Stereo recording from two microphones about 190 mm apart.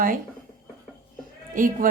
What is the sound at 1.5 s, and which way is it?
Speech, 45° right (ahead or behind).